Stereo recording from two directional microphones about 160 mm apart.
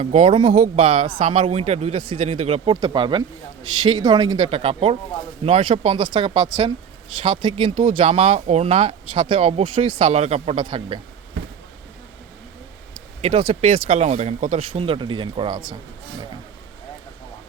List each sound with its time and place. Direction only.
0.0 s speech: 40° right (ahead or behind)
12.9 s a sound: 35° right (ahead or behind)
13.6 s speech: 40° right (ahead or behind)
14.7 s speech: 35° right (ahead or behind)